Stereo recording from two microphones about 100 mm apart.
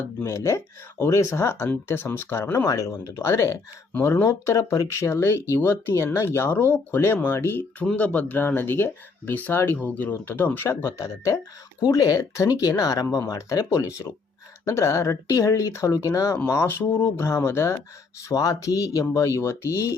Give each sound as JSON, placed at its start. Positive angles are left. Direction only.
{"t": 0.0, "sound": "speech", "side_deg": 25}
{"t": 10.8, "sound": "speech", "side_deg": 30}